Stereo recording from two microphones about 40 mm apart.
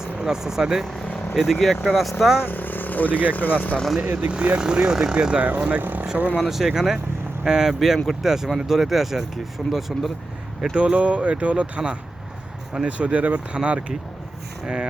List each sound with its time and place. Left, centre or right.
0.0 s speech: centre
2.4 s speech: left
4.0 s speech: right
4.3 s speech: right
5.1 s speech: right
5.4 s speech: right
6.5 s speech: centre
10.8 s speech: right
13.0 s speech: right